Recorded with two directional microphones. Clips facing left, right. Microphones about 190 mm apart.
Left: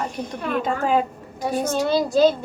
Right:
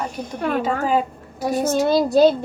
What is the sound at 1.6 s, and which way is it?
Speech, 45° right (ahead or behind).